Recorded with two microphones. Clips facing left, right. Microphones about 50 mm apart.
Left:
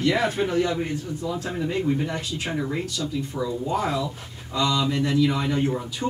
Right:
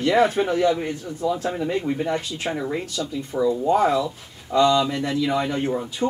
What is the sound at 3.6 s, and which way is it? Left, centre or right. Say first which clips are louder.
Speech: right 6 dB; right.